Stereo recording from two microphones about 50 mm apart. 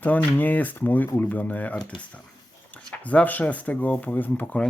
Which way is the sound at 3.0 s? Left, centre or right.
Left.